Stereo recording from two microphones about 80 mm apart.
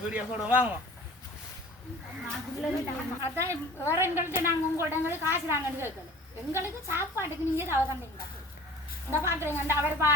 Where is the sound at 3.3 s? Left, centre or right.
Right.